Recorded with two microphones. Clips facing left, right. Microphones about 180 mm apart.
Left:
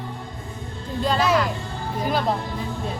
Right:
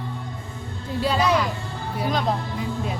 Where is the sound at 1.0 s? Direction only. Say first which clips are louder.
Left 1 dB; 5° right (ahead or behind).